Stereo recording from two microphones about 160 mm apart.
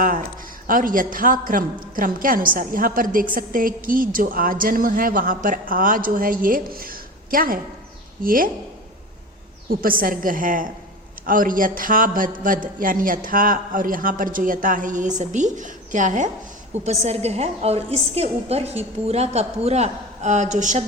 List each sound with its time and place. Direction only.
0.0 s a woman's voice: 60° right (ahead or behind)
9.6 s a woman's voice: 65° right (ahead or behind)